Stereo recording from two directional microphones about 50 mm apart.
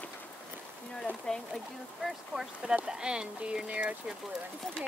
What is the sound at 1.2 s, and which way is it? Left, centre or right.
Speech, centre.